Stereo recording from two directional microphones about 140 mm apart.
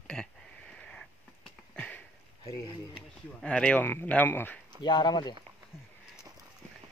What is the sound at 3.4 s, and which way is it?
Speech, 10° left (ahead or behind).